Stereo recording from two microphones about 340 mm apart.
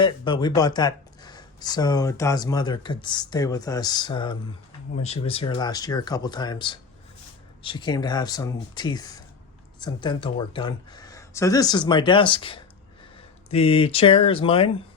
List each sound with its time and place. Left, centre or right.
0.0 s speech: centre